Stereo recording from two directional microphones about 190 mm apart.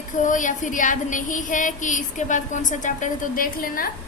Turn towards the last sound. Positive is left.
turn(degrees=50)  # may be behind; listen again after turning